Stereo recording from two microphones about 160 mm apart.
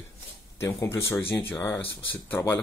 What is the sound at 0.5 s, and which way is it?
Speech, 15° left (ahead or behind).